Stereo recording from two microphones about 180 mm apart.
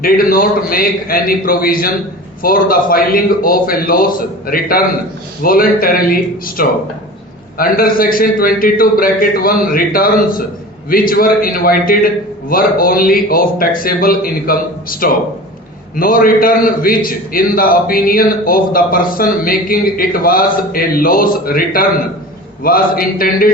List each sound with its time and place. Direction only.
0.0 s a man's voice: 55° left (ahead or behind)